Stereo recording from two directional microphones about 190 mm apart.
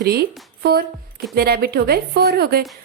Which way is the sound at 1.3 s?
55° right (ahead or behind).